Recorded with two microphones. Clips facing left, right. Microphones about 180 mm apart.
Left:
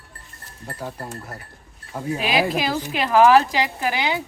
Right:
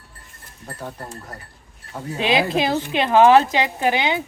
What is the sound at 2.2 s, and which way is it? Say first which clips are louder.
Speech: right 3 dB; 25° right (ahead or behind).